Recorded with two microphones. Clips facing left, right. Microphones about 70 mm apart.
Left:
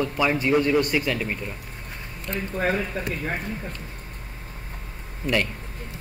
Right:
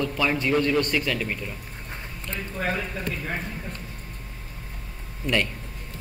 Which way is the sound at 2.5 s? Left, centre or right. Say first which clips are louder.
Left 3 dB; left.